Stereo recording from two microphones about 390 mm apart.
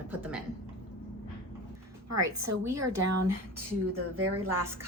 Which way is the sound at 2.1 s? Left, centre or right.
Right.